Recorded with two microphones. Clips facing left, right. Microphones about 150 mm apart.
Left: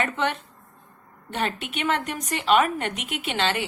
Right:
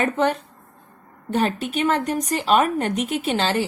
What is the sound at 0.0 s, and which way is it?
Speech, 40° right (ahead or behind).